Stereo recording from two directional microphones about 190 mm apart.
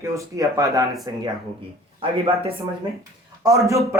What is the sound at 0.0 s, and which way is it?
Speech, 15° right (ahead or behind).